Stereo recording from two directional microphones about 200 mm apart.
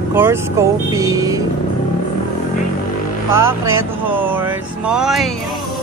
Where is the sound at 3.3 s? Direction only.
15° right (ahead or behind).